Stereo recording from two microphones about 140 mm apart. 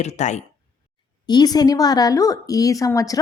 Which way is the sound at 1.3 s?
30° left (ahead or behind).